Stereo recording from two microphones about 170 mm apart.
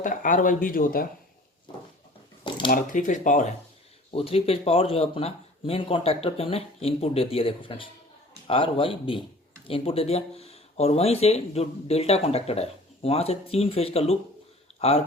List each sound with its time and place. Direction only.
0.0 s speech: 50° left (ahead or behind)
2.6 s speech: 50° left (ahead or behind)
4.1 s speech: 35° left (ahead or behind)